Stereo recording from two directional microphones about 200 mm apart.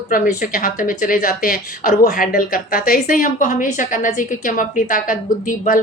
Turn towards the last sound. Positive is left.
turn(degrees=40)  # may be behind; listen again after turning